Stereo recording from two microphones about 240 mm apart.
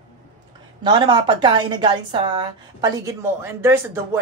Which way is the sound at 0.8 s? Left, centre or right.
Centre.